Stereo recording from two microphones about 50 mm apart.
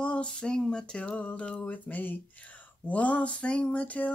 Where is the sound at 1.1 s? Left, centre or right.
Left.